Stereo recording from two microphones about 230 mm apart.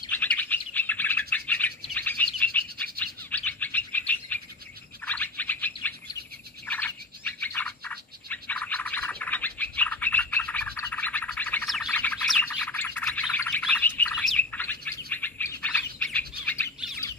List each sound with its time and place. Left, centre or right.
0.1 s bird: centre